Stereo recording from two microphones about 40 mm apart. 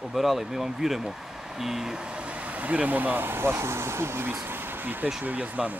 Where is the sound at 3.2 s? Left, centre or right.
Right.